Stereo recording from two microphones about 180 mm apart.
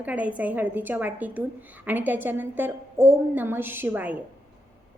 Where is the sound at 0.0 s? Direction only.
10° right (ahead or behind).